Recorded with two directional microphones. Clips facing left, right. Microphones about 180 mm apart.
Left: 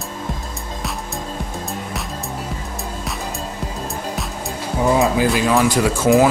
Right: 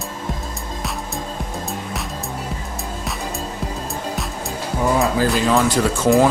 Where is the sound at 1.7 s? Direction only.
Centre (ahead or behind).